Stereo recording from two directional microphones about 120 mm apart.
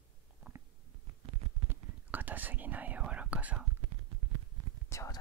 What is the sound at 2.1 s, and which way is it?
Whispering, 15° right (ahead or behind).